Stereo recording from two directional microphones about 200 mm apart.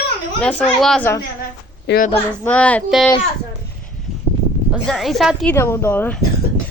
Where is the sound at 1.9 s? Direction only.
60° left (ahead or behind).